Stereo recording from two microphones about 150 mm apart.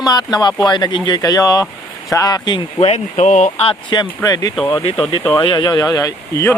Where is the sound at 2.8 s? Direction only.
45° left (ahead or behind).